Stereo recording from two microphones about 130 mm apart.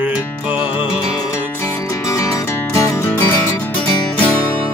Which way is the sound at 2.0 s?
25° left (ahead or behind).